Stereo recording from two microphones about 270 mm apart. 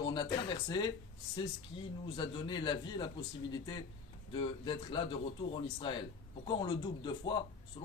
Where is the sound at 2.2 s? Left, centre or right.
Centre.